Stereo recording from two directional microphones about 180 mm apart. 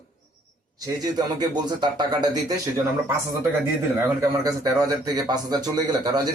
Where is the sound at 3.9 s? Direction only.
20° right (ahead or behind).